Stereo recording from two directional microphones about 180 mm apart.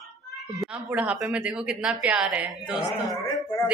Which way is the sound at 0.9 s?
10° right (ahead or behind).